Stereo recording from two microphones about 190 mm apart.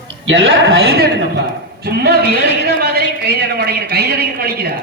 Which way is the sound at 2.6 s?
55° right (ahead or behind).